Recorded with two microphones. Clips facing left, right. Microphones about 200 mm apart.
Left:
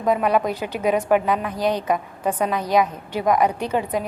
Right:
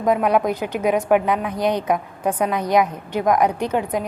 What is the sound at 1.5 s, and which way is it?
Speech, 20° right (ahead or behind).